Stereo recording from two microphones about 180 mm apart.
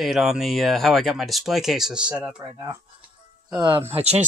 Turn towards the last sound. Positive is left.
turn(degrees=-35)  # may be behind; listen again after turning